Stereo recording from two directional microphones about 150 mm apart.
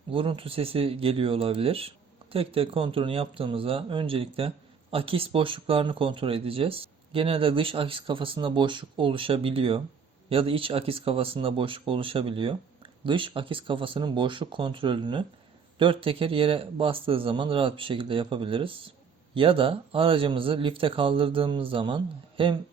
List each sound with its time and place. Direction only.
0.1 s speech: 35° right (ahead or behind)